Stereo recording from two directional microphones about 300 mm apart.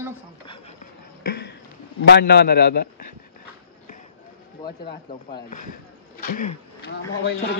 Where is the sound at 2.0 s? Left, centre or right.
Left.